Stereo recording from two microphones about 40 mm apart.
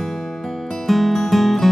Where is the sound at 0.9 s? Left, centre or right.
Centre.